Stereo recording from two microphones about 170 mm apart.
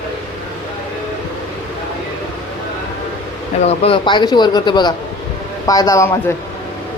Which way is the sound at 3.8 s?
30° left (ahead or behind).